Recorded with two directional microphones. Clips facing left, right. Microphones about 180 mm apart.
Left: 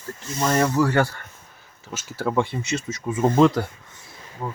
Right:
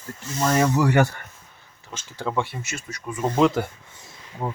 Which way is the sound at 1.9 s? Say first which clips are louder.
Left 3 dB; 10° left (ahead or behind).